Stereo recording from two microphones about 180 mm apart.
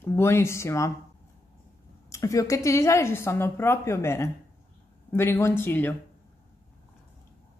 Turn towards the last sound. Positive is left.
turn(degrees=10)  # may be behind; listen again after turning